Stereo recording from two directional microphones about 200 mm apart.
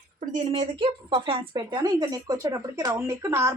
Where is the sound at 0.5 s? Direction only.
25° right (ahead or behind).